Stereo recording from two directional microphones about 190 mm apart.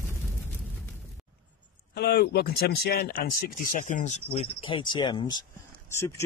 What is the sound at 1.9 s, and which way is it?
Speech, 60° left (ahead or behind).